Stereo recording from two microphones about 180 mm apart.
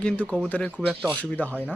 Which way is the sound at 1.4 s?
10° left (ahead or behind).